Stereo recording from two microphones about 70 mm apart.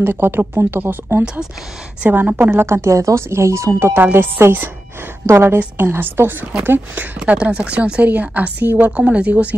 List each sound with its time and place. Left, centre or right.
0.0 s speech: right
1.2 s a woman's voice: centre
2.6 s speech: right
3.9 s a woman's voice: right
7.2 s a woman's voice: centre